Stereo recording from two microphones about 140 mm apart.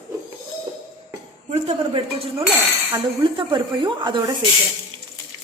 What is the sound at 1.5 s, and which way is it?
Speech, 50° right (ahead or behind).